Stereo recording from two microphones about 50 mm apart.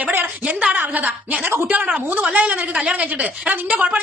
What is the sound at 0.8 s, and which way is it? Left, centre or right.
A man's voice, right.